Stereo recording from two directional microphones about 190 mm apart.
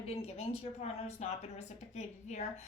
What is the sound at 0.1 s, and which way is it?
A woman's voice, 30° left (ahead or behind).